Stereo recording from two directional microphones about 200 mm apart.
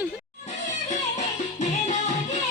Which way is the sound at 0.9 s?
35° left (ahead or behind).